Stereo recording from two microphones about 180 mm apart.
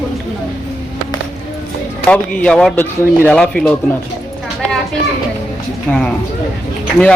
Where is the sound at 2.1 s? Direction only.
5° left (ahead or behind).